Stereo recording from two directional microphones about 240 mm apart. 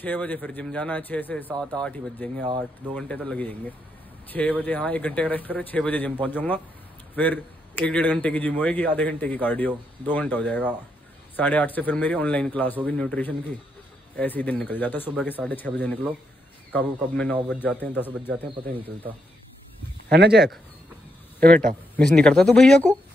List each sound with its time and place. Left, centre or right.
0.0 s a man's voice: centre
20.1 s speech: right
21.9 s speech: centre